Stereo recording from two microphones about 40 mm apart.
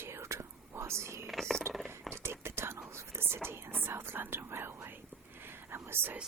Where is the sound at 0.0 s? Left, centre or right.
Right.